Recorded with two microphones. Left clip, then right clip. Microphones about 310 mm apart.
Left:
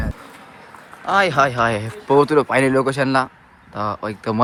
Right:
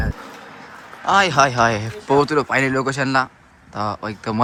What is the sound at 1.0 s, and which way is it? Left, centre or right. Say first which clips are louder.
Speech: right 1 dB; centre.